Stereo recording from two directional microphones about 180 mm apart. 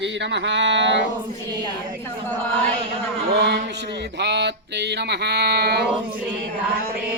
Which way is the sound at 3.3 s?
70° right (ahead or behind).